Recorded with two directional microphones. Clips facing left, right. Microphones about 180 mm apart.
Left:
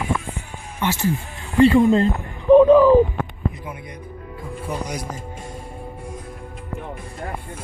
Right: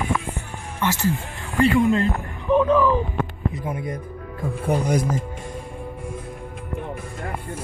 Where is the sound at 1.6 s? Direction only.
30° left (ahead or behind).